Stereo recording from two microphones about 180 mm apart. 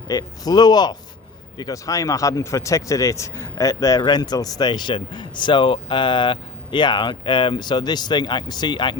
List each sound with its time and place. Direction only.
0.1 s speech: 20° left (ahead or behind)